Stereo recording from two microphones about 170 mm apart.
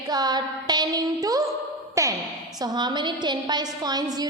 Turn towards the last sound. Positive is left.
turn(degrees=-25)  # may be behind; listen again after turning